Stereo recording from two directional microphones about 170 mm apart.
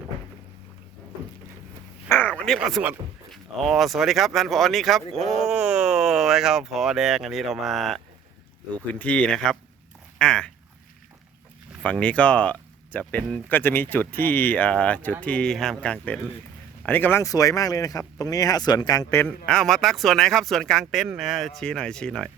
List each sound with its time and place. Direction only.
2.0 s a sound: 10° left (ahead or behind)
3.3 s speech: centre (ahead or behind)
11.8 s speech: 5° left (ahead or behind)
19.5 s speech: centre (ahead or behind)